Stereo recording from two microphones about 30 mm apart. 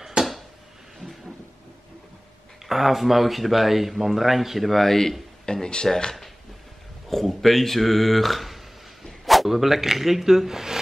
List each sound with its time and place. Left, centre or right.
0.2 s a sound: right
2.7 s speech: centre
5.4 s speech: left
7.1 s speech: centre
9.2 s a sound: centre
9.5 s speech: centre